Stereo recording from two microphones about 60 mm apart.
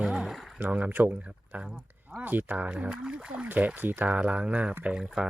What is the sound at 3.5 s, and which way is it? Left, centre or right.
Speech, right.